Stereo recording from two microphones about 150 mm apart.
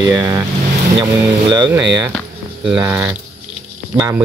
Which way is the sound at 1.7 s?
20° right (ahead or behind).